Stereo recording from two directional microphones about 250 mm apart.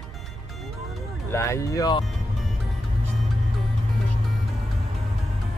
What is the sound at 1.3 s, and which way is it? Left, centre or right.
Speech, centre.